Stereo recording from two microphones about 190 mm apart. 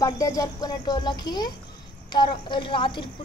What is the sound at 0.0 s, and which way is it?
A woman's voice, 20° left (ahead or behind).